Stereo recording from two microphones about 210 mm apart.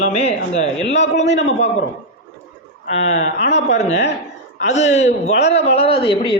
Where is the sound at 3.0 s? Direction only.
30° left (ahead or behind).